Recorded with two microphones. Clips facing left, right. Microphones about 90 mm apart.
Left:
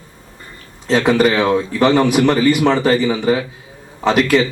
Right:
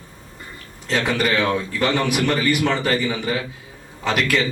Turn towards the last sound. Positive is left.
turn(degrees=35)  # may be behind; listen again after turning